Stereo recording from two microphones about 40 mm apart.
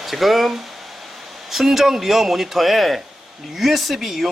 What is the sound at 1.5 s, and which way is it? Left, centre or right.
Speech, centre.